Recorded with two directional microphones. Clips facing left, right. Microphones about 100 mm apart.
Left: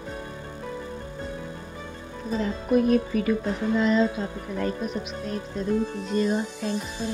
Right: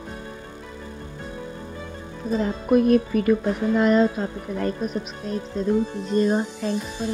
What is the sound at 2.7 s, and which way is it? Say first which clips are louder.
Speech: right 3 dB; 55° right (ahead or behind).